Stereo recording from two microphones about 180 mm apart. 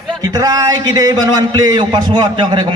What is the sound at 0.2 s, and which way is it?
A man's voice, 20° right (ahead or behind).